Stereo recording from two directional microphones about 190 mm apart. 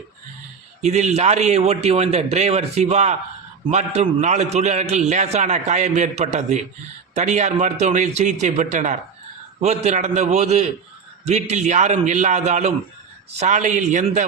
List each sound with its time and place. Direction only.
0.8 s a man's voice: 35° right (ahead or behind)